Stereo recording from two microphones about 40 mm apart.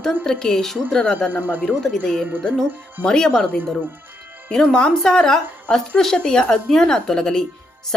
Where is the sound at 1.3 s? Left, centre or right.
Right.